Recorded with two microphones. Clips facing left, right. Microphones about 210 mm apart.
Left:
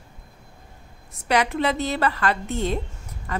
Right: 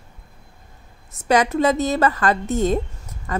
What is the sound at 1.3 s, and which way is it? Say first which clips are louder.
A woman's voice: right 5 dB; 45° right (ahead or behind).